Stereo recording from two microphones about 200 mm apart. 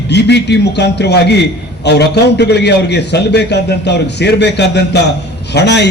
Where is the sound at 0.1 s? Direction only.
55° left (ahead or behind).